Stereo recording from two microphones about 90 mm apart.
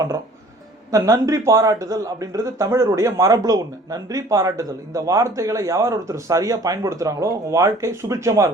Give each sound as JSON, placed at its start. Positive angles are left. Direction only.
{"t": 0.9, "sound": "speech", "side_deg": -40}